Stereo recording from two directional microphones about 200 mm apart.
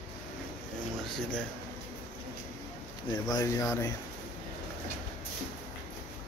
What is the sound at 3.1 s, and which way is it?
Speech, 20° left (ahead or behind).